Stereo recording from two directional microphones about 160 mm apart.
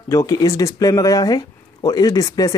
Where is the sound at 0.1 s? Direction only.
20° left (ahead or behind).